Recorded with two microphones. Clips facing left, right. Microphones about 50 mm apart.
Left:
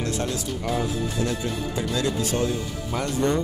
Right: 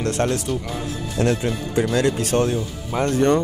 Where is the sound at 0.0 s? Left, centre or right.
Right.